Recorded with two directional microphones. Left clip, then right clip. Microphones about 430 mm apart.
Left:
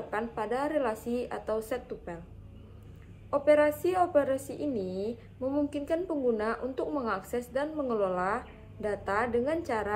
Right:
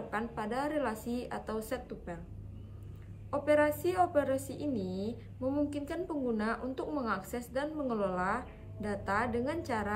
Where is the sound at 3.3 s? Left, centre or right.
Centre.